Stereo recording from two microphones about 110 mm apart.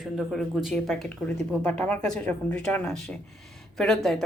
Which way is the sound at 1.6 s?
10° left (ahead or behind).